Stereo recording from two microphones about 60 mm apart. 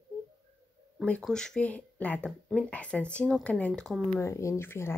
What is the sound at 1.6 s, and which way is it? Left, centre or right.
Speech, left.